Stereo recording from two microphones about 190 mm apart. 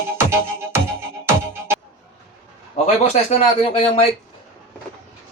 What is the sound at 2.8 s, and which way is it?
Speech, 35° left (ahead or behind).